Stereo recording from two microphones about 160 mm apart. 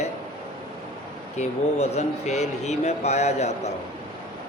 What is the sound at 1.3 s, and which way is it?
Speech, 45° left (ahead or behind).